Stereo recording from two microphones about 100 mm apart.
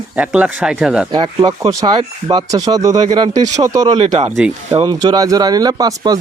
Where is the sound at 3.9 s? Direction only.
90° right.